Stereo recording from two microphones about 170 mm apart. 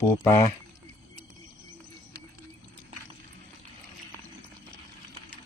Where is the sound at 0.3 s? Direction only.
15° left (ahead or behind).